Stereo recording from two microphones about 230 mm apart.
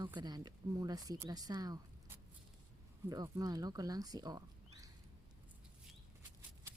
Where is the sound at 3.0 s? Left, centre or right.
Centre.